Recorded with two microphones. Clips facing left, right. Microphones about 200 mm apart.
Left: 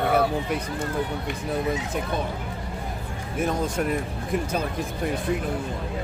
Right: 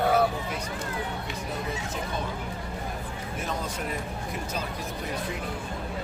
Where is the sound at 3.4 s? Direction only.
50° left (ahead or behind).